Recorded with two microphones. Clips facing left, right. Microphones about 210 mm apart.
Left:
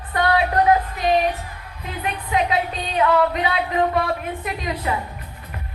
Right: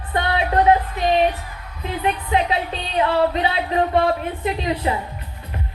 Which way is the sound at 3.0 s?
30° right (ahead or behind).